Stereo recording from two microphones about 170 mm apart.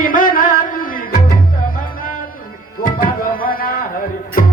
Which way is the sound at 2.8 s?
55° left (ahead or behind).